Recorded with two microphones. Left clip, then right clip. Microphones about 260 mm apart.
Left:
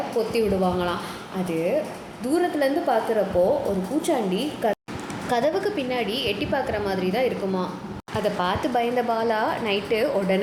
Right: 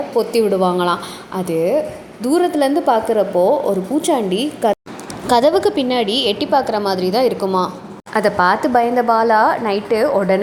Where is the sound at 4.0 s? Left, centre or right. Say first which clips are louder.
Right 5 dB; right.